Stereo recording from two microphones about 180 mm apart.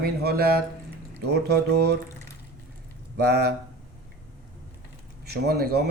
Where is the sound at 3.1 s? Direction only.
65° right (ahead or behind).